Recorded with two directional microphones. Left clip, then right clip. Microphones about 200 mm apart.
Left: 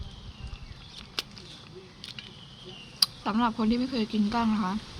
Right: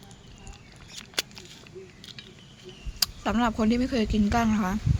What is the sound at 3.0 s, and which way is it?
Speech, 20° right (ahead or behind).